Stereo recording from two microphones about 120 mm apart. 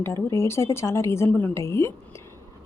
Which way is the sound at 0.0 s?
20° left (ahead or behind).